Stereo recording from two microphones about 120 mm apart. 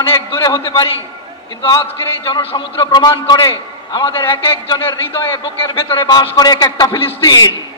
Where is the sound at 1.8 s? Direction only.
20° left (ahead or behind).